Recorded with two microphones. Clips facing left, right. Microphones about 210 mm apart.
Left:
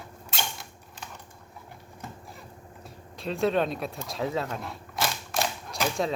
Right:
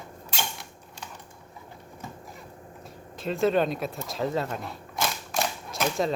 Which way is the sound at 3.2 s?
Centre (ahead or behind).